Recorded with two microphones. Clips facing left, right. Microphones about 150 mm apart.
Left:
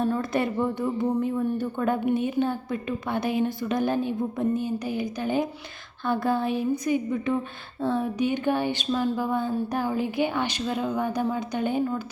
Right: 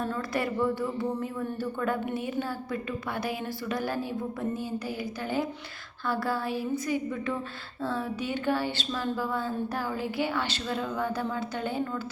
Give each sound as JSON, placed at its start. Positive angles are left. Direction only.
{"t": 0.0, "sound": "a woman's voice", "side_deg": 20}